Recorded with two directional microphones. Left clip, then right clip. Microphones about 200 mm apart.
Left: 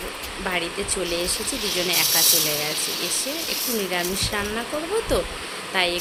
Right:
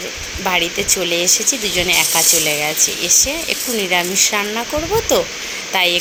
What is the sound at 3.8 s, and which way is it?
Speech, 20° right (ahead or behind).